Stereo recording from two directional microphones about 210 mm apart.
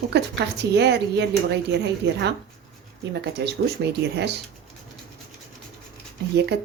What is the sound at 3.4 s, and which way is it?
Speech, 50° right (ahead or behind).